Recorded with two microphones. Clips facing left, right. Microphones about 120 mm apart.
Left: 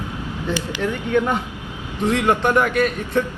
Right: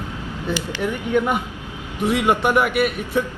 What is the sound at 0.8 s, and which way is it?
A man's voice, 15° right (ahead or behind).